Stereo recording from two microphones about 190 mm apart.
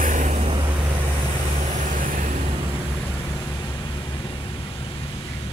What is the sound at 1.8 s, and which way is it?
Vehicle, 45° right (ahead or behind).